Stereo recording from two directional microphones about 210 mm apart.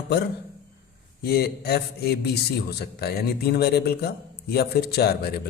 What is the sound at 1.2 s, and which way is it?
A man's voice, 50° left (ahead or behind).